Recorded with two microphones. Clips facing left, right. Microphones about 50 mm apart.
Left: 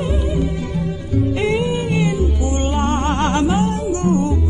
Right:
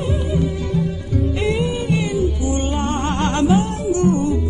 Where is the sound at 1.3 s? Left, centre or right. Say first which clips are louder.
Left 1 dB; left.